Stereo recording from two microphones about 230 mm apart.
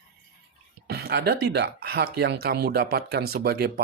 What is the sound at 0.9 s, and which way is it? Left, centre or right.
Speech, right.